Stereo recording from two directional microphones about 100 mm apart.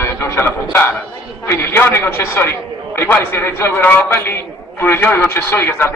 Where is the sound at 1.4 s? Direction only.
25° left (ahead or behind).